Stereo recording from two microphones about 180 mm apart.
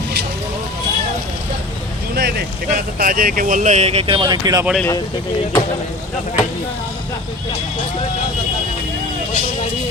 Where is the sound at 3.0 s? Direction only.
50° right (ahead or behind); by 4.6 s 20° right (ahead or behind).